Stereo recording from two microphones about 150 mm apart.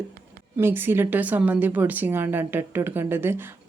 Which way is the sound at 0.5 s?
15° right (ahead or behind).